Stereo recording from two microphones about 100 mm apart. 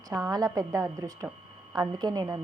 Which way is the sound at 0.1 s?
40° right (ahead or behind).